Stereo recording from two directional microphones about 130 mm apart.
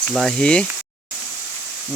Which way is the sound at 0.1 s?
Centre (ahead or behind).